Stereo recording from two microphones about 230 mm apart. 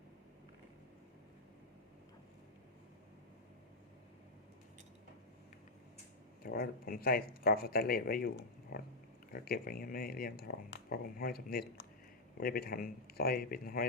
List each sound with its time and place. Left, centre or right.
6.4 s speech: left